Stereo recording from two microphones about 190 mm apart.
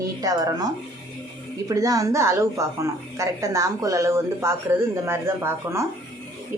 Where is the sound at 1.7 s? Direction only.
20° right (ahead or behind).